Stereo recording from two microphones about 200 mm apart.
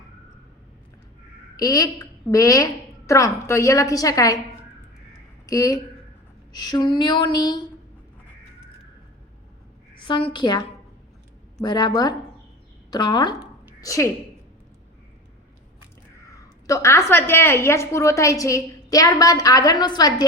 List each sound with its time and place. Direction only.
1.5 s a woman's voice: 20° left (ahead or behind)
5.5 s a woman's voice: 15° left (ahead or behind)
6.5 s a sound: 20° left (ahead or behind)
10.0 s a sound: 25° left (ahead or behind)
13.8 s a woman's voice: 15° left (ahead or behind)
16.6 s a woman's voice: 15° left (ahead or behind)